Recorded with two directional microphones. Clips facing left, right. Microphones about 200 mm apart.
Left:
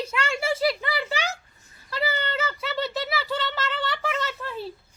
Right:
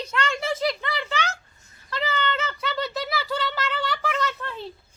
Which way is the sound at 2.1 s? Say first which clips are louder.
Right 3 dB; 35° left (ahead or behind).